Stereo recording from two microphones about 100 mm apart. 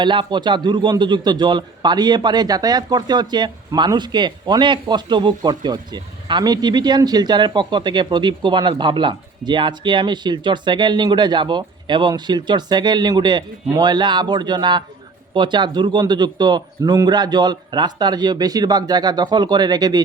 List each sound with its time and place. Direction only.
0.0 s a man's voice: 50° right (ahead or behind)